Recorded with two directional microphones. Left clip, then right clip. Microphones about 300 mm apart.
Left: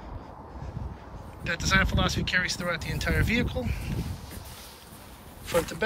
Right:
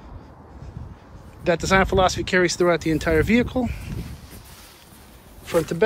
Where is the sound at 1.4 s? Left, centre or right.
Centre.